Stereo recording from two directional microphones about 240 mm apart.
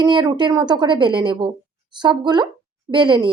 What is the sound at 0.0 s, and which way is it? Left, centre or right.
Speech, centre.